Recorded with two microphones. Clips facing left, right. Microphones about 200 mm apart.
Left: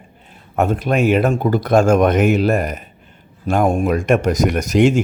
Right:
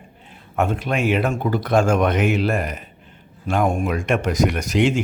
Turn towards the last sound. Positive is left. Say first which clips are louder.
# left 5 dB
turn(degrees=45)  # may be behind; listen again after turning